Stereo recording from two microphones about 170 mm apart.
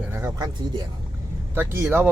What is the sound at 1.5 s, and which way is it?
Speech, 15° right (ahead or behind).